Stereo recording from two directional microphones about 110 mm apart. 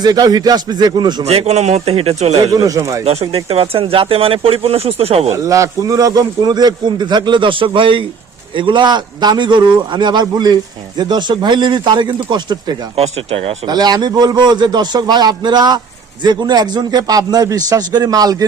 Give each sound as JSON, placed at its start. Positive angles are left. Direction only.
{"t": 0.0, "sound": "a man's voice", "side_deg": -35}
{"t": 1.2, "sound": "speech", "side_deg": -70}
{"t": 2.6, "sound": "a man's voice", "side_deg": -30}
{"t": 3.0, "sound": "speech", "side_deg": -70}
{"t": 5.3, "sound": "a man's voice", "side_deg": -30}
{"t": 13.0, "sound": "speech", "side_deg": -65}
{"t": 13.7, "sound": "a man's voice", "side_deg": -40}